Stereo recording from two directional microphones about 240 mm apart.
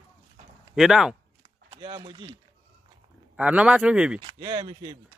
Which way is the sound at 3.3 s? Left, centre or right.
Centre.